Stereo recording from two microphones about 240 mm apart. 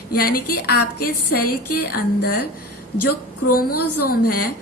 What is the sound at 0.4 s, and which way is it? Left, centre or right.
Speech, left.